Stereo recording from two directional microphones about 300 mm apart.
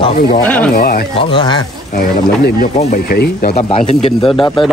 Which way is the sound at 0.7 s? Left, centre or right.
Left.